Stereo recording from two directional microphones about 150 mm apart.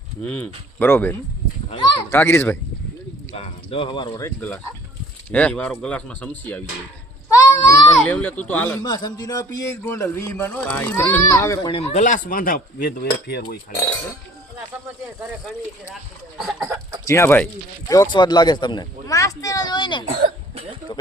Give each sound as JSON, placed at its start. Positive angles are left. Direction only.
{"t": 0.3, "sound": "speech", "side_deg": 10}
{"t": 3.3, "sound": "speech", "side_deg": 40}
{"t": 4.2, "sound": "speech", "side_deg": 15}
{"t": 7.3, "sound": "a sound", "side_deg": 20}
{"t": 8.0, "sound": "speech", "side_deg": 10}
{"t": 8.8, "sound": "speech", "side_deg": 25}
{"t": 11.7, "sound": "cutlery", "side_deg": 45}
{"t": 16.4, "sound": "chicken", "side_deg": 0}
{"t": 16.6, "sound": "speech", "side_deg": -15}
{"t": 17.1, "sound": "speech", "side_deg": 15}
{"t": 17.9, "sound": "speech", "side_deg": 30}